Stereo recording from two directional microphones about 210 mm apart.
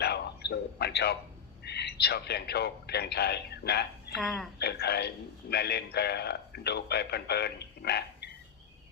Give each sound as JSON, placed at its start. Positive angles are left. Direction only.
{"t": 0.0, "sound": "a sound", "side_deg": 50}
{"t": 1.6, "sound": "speech", "side_deg": 50}
{"t": 4.2, "sound": "speech", "side_deg": 0}
{"t": 4.6, "sound": "a man's voice", "side_deg": 50}